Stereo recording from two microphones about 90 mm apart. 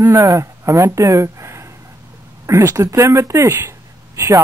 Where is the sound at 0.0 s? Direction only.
35° right (ahead or behind).